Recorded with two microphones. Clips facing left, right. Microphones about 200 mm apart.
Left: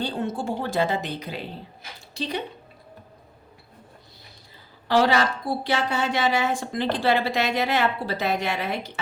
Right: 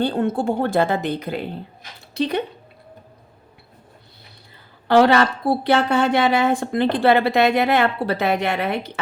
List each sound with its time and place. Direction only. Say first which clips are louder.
0.0 s a woman's voice: right 7 dB; 55° right (ahead or behind)
4.9 s a woman's voice: right 6 dB; 60° right (ahead or behind)